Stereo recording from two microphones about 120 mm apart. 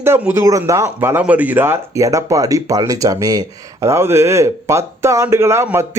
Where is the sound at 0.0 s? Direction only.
20° right (ahead or behind).